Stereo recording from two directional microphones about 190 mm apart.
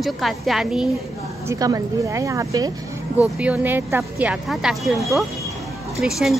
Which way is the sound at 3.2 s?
5° right (ahead or behind).